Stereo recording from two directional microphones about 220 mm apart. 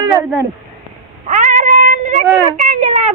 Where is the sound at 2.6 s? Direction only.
35° right (ahead or behind).